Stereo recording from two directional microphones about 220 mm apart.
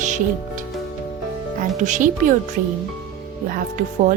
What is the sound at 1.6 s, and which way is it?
Speech, 35° right (ahead or behind).